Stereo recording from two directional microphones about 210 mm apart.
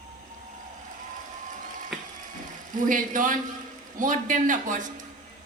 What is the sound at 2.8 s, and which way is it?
A woman's voice, 40° right (ahead or behind).